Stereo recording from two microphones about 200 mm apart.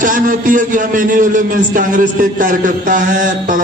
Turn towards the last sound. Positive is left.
turn(degrees=-40)  # may be behind; listen again after turning